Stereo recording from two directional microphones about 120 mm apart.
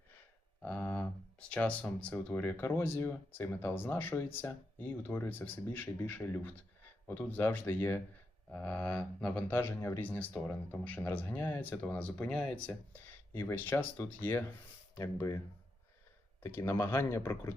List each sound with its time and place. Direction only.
0.6 s speech: 15° left (ahead or behind)
16.4 s speech: 20° left (ahead or behind)